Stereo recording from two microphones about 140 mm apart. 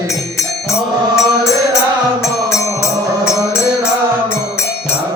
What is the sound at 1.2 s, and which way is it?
Music, 20° left (ahead or behind).